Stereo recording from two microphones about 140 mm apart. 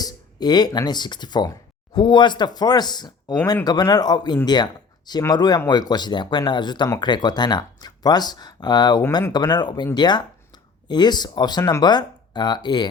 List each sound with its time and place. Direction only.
0.0 s speech: 30° left (ahead or behind)